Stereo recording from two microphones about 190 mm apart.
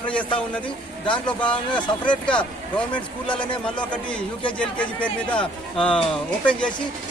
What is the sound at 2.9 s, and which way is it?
Speech, 25° left (ahead or behind).